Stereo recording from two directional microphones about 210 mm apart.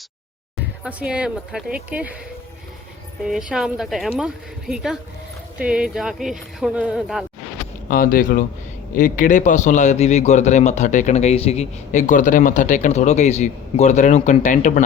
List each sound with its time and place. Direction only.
0.9 s speech: 5° right (ahead or behind)
3.2 s speech: centre (ahead or behind)
7.9 s a man's voice: 40° left (ahead or behind)